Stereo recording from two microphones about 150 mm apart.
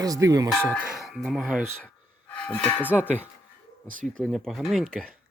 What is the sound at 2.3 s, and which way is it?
Speech, 10° left (ahead or behind).